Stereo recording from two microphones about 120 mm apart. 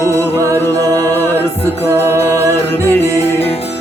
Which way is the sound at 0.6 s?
15° left (ahead or behind).